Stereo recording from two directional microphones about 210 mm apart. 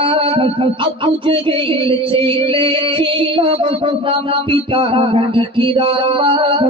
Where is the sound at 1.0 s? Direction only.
25° right (ahead or behind).